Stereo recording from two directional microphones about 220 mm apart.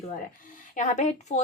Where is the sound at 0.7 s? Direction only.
30° left (ahead or behind).